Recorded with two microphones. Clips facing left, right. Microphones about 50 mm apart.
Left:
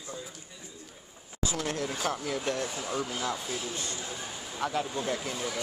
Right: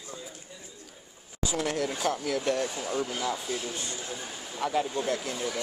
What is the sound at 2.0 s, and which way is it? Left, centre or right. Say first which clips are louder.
Speech: right 3 dB; centre.